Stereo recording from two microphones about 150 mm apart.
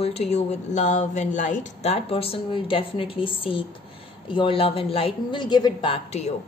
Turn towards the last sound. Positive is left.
turn(degrees=40)  # may be behind; listen again after turning